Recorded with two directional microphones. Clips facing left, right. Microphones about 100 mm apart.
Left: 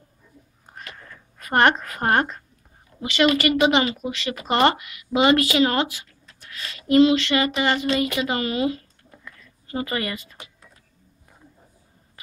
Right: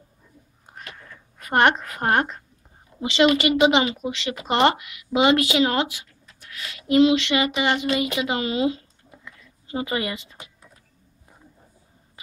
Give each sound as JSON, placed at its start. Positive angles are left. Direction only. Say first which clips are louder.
{"t": 1.0, "sound": "a woman's voice", "louder": "even", "side_deg": -10}